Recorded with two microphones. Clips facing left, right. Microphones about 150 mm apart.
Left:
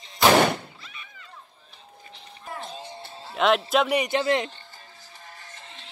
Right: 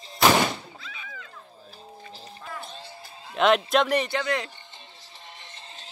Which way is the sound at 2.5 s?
25° left (ahead or behind).